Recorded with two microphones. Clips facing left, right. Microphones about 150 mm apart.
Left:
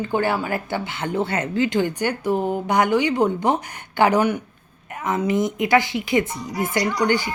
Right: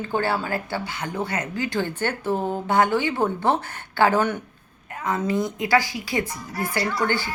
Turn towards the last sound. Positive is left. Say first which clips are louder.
# left 4 dB
turn(degrees=15)  # may be behind; listen again after turning